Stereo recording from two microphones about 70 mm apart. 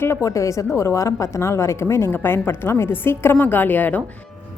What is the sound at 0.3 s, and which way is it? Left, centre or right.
A woman's voice, left.